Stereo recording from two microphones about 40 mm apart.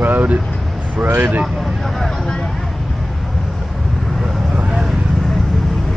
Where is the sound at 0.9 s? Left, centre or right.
Right.